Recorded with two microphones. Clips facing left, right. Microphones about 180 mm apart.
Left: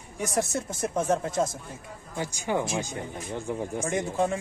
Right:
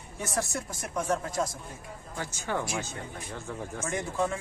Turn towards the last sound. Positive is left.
turn(degrees=20)  # may be behind; listen again after turning